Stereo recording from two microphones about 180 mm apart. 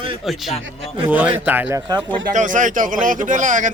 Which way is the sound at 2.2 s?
45° right (ahead or behind).